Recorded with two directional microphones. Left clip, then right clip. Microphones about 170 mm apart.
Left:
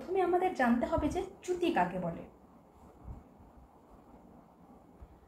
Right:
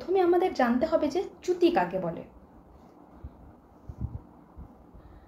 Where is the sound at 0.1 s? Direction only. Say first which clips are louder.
Right 6 dB; 70° right (ahead or behind).